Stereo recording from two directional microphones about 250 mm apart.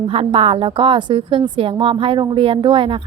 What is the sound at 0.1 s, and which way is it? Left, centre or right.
A woman's voice, right.